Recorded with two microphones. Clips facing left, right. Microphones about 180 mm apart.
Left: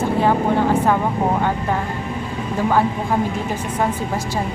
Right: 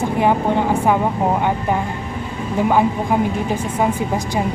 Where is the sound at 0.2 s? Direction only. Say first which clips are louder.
Right 1 dB; 15° right (ahead or behind).